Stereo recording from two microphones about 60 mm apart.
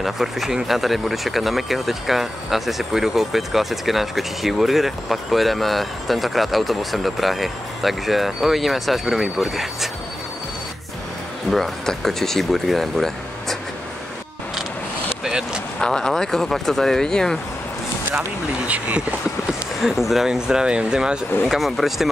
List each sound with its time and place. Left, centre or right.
0.0 s speech: centre
11.5 s speech: centre
15.2 s a sound: centre
15.8 s speech: centre
18.7 s speech: right
19.8 s speech: centre
21.5 s speech: centre